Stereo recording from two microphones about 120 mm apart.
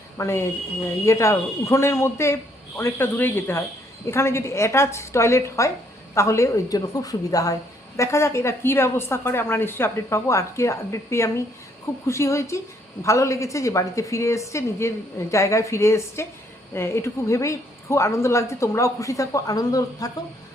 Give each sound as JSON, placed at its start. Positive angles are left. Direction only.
{"t": 0.2, "sound": "a woman's voice", "side_deg": 25}